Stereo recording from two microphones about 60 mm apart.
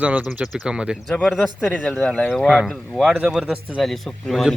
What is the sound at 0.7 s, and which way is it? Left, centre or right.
Speech, centre.